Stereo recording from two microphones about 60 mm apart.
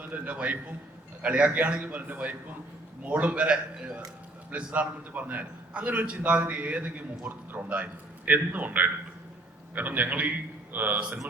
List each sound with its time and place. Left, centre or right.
0.0 s a man's voice: right